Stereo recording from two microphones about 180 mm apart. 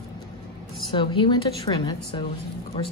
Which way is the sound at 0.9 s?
25° left (ahead or behind).